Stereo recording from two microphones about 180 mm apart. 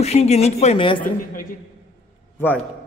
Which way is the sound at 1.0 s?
50° left (ahead or behind).